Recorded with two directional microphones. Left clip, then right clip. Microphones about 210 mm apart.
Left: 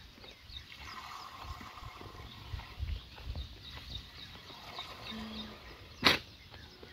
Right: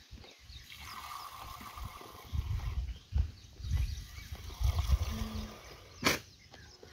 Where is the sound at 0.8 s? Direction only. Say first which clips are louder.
Right 3 dB; 25° right (ahead or behind).